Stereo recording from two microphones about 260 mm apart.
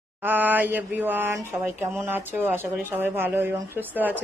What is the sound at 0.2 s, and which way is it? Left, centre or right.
Speech, centre.